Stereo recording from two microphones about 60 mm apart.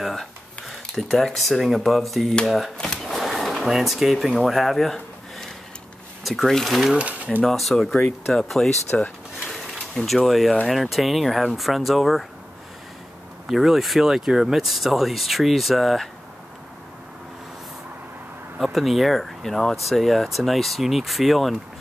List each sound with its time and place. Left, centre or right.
0.0 s a sound: centre
1.2 s speech: centre
3.1 s a sound: centre
6.2 s speech: centre
8.9 s speech: centre
10.0 s speech: centre
13.5 s speech: centre
18.6 s speech: centre